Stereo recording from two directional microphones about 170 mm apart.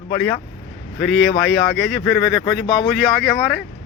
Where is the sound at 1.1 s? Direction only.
Centre (ahead or behind).